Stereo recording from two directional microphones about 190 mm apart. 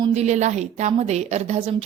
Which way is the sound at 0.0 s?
35° right (ahead or behind).